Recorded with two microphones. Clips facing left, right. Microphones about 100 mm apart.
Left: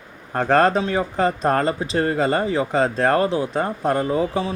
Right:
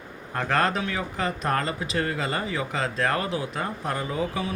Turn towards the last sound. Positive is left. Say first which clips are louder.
# left 7 dB
turn(degrees=30)  # may be behind; listen again after turning